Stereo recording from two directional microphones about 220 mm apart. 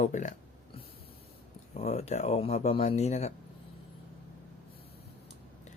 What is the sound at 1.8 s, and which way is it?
Speech, 30° left (ahead or behind).